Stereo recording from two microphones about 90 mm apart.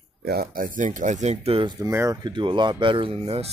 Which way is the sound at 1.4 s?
90° right.